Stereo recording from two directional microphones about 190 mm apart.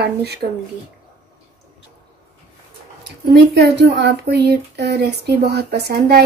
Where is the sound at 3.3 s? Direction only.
60° right (ahead or behind).